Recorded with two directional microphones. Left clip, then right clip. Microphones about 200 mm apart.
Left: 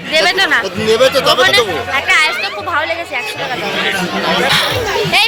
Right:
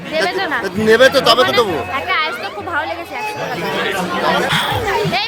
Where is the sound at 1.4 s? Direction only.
15° right (ahead or behind).